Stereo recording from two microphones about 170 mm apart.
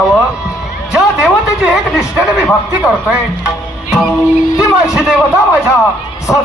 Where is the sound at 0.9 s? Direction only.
Centre (ahead or behind).